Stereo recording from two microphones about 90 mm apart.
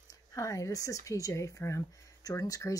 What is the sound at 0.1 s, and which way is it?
Speech, 35° left (ahead or behind).